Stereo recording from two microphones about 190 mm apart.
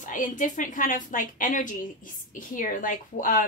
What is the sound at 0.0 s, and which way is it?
A woman's voice, 45° left (ahead or behind).